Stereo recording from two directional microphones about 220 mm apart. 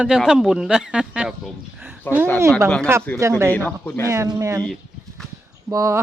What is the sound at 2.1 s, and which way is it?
Speech, 10° left (ahead or behind).